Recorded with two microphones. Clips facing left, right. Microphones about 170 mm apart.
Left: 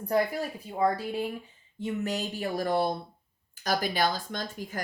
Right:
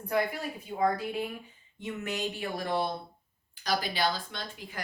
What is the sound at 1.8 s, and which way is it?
A woman's voice, 35° left (ahead or behind).